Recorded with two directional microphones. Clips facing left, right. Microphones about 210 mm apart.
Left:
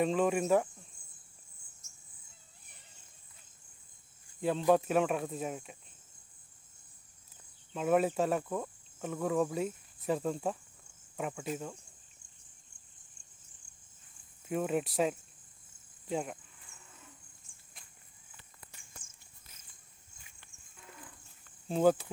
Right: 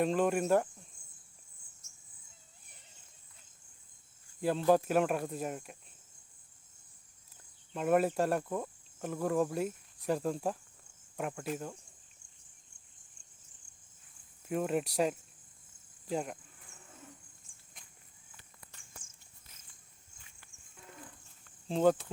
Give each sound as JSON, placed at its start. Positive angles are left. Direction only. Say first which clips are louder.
{"t": 0.0, "sound": "speech", "louder": "even", "side_deg": 0}
{"t": 4.4, "sound": "speech", "louder": "even", "side_deg": 0}
{"t": 7.7, "sound": "speech", "louder": "even", "side_deg": 0}
{"t": 14.4, "sound": "speech", "louder": "even", "side_deg": 0}
{"t": 21.7, "sound": "speech", "louder": "left 1 dB", "side_deg": 5}